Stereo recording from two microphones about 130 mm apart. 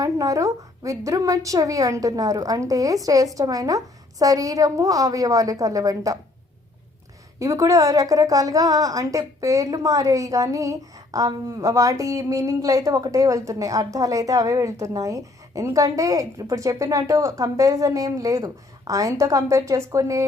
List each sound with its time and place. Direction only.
0.0 s a woman's voice: 25° right (ahead or behind)
7.3 s a woman's voice: 25° right (ahead or behind)